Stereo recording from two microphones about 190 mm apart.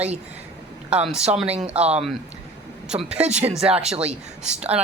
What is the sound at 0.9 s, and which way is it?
Speech, 5° right (ahead or behind).